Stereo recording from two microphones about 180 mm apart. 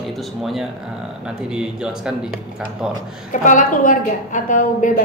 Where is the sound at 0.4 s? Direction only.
Centre (ahead or behind).